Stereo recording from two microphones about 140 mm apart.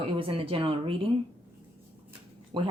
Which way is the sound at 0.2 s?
40° right (ahead or behind).